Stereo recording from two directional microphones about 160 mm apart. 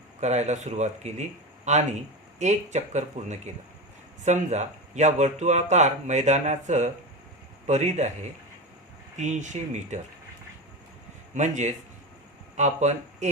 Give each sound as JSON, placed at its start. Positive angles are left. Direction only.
{"t": 0.2, "sound": "a man's voice", "side_deg": -45}
{"t": 9.1, "sound": "a man's voice", "side_deg": -50}
{"t": 11.3, "sound": "a man's voice", "side_deg": -50}